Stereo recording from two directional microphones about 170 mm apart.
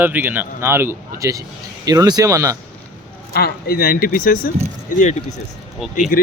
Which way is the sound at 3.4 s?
65° left (ahead or behind).